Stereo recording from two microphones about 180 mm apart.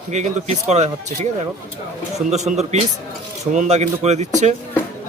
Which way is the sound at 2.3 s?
40° right (ahead or behind).